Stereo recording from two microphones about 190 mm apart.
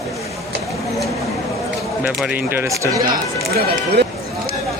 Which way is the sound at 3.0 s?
50° right (ahead or behind).